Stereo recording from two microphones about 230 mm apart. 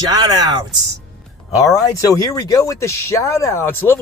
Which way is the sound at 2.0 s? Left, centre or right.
Centre.